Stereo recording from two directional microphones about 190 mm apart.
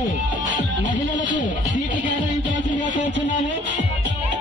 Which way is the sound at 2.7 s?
45° left (ahead or behind).